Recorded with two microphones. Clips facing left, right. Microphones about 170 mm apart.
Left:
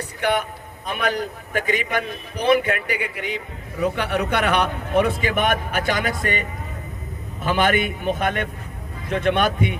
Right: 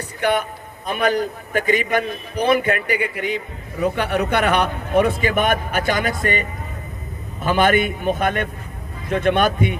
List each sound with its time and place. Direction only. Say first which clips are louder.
0.2 s a man's voice: right 2 dB; 45° right (ahead or behind)
7.4 s a man's voice: right 3 dB; 45° right (ahead or behind)